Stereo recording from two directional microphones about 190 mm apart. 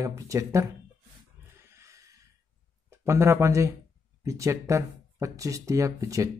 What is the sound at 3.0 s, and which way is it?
Speech, 15° right (ahead or behind).